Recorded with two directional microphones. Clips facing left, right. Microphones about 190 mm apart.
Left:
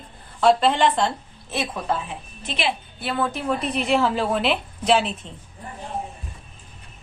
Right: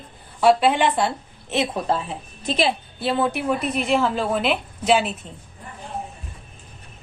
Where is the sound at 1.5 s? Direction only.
25° right (ahead or behind).